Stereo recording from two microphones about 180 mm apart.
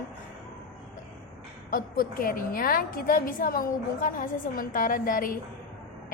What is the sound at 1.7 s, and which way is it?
A woman's voice, 55° left (ahead or behind).